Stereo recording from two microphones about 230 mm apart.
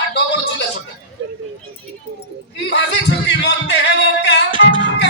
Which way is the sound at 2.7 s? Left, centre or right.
Left.